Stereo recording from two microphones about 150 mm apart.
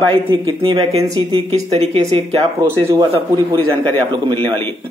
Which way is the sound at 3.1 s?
35° right (ahead or behind).